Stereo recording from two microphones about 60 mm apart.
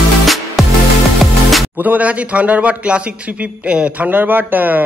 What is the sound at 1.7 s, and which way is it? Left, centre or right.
A man's voice, right.